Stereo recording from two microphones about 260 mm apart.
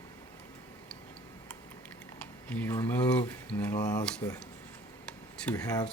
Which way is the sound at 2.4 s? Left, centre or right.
Centre.